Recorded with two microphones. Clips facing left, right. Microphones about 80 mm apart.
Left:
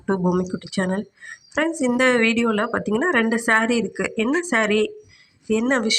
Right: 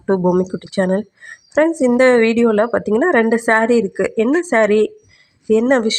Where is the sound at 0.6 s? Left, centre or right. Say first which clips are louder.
Right 7 dB; right.